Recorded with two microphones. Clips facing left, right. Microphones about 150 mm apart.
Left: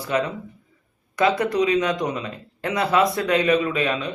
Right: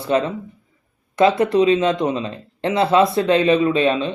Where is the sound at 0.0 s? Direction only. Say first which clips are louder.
Right 4 dB; 25° right (ahead or behind).